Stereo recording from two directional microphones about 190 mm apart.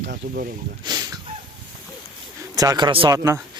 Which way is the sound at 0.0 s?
60° right (ahead or behind).